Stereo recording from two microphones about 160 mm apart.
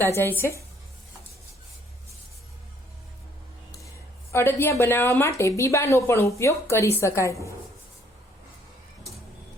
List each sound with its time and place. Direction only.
0.2 s a woman's voice: 15° left (ahead or behind)
4.3 s a woman's voice: 15° left (ahead or behind)